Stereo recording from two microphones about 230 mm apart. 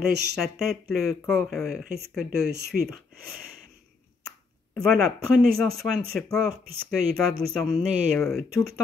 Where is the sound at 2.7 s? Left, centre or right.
Left.